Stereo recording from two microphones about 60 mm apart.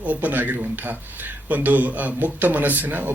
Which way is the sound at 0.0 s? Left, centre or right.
Right.